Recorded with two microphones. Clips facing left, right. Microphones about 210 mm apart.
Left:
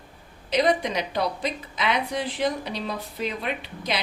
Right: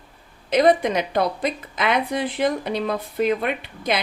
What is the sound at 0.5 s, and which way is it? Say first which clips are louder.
A woman's voice: right 5 dB; 50° right (ahead or behind).